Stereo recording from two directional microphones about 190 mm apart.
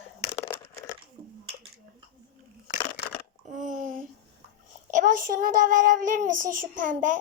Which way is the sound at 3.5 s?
40° right (ahead or behind).